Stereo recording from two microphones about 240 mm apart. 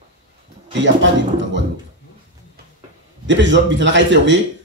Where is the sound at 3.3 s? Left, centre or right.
Right.